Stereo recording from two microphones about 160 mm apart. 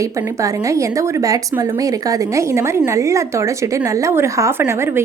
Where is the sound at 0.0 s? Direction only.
20° right (ahead or behind).